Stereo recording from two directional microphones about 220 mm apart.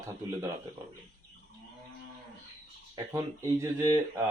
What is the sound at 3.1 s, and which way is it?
Speech, 15° right (ahead or behind).